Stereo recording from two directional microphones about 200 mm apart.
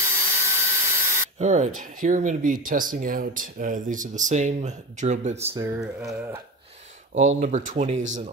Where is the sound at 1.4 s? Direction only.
35° right (ahead or behind).